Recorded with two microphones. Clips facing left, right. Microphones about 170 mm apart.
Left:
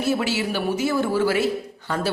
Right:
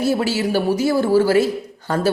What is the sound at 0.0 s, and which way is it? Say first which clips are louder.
Speech: right 4 dB; 35° right (ahead or behind).